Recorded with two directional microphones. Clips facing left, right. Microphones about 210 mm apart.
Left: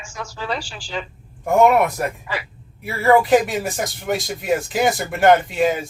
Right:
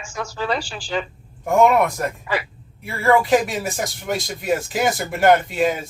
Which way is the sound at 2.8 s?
5° left (ahead or behind).